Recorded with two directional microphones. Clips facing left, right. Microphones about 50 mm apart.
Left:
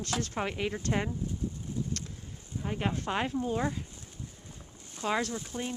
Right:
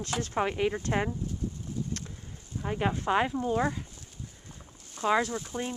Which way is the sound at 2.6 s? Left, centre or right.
Centre.